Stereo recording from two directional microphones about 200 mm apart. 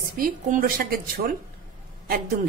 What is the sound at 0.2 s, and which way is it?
A woman's voice, 45° right (ahead or behind).